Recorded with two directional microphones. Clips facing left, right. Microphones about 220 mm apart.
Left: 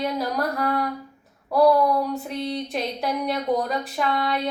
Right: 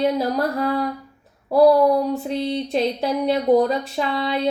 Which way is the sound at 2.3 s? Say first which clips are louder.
Right 5 dB; 30° right (ahead or behind).